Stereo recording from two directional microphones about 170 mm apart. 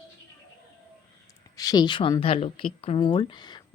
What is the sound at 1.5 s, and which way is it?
A woman's voice, 20° left (ahead or behind).